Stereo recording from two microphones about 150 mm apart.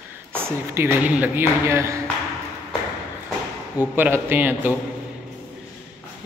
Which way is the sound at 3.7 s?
10° right (ahead or behind).